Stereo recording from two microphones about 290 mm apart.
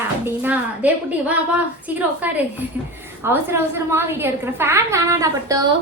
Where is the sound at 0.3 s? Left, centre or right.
Centre.